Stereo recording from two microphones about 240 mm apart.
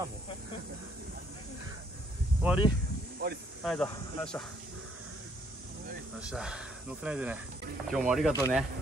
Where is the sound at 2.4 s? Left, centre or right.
Centre.